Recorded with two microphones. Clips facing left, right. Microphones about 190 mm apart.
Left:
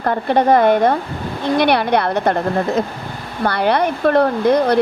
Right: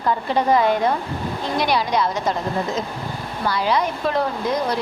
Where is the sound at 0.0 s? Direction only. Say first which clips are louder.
Left 5 dB; 60° left (ahead or behind).